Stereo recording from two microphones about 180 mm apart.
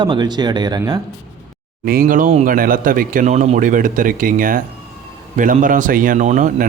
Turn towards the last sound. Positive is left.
turn(degrees=-45)  # may be behind; listen again after turning